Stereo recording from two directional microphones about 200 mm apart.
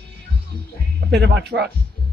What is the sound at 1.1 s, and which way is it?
Speech, 60° right (ahead or behind).